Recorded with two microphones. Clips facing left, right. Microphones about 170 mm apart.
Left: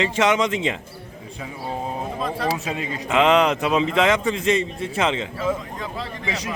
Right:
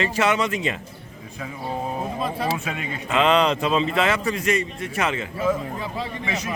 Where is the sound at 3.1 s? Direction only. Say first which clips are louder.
Left 2 dB; 15° left (ahead or behind).